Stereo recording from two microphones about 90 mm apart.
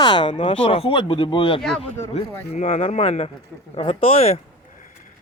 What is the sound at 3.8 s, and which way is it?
Speech, 90° left.